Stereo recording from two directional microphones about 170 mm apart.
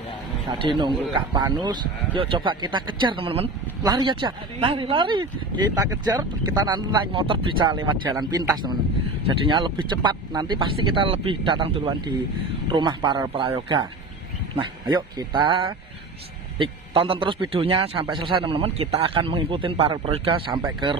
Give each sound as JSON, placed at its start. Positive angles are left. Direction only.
{"t": 0.5, "sound": "speech", "side_deg": -25}
{"t": 14.9, "sound": "speech", "side_deg": -25}